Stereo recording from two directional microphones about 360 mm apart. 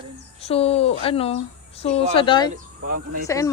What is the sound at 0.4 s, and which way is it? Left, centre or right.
Speech, centre.